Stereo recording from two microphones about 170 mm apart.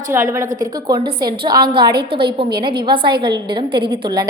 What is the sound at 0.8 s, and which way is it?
A woman's voice, 30° right (ahead or behind).